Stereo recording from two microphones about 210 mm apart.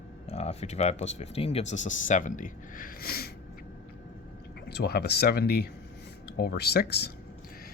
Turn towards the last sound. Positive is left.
turn(degrees=50)  # may be behind; listen again after turning